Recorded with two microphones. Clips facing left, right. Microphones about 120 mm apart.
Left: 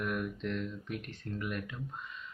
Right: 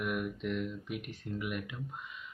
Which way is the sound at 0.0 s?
10° right (ahead or behind).